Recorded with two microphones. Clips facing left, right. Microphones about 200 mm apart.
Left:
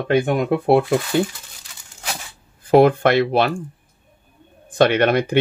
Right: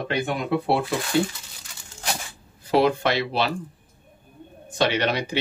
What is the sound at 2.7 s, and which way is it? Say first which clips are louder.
Speech: left 7 dB; 50° left (ahead or behind).